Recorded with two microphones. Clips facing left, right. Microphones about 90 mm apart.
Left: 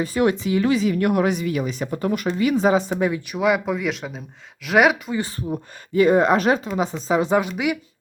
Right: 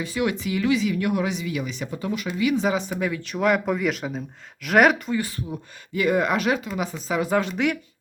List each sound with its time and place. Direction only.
0.0 s speech: 40° left (ahead or behind)
3.0 s speech: 25° left (ahead or behind)
3.3 s speech: 5° left (ahead or behind)
5.5 s speech: 35° left (ahead or behind)
7.3 s a woman's voice: 10° left (ahead or behind)